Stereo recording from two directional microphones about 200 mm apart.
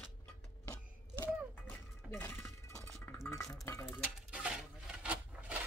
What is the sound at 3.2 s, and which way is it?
Stir, 10° left (ahead or behind).